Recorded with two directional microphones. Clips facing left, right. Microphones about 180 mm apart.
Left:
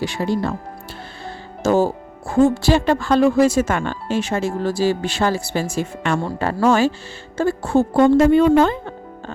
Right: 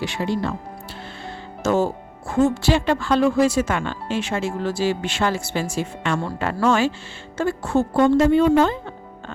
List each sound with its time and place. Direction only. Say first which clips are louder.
0.0 s speech: left 3 dB; 40° left (ahead or behind)
1.6 s speech: left 3 dB; 35° left (ahead or behind)
7.9 s a woman's voice: left 3 dB; 50° left (ahead or behind)